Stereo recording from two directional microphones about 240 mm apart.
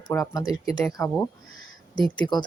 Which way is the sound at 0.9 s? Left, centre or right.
Centre.